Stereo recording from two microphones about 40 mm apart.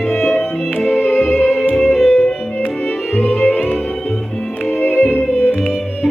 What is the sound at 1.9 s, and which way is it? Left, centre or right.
Music, centre.